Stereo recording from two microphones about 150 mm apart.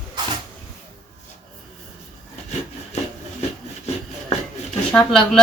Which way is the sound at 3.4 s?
45° left (ahead or behind).